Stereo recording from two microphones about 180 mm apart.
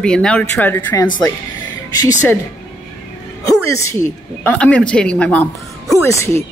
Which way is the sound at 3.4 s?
15° left (ahead or behind).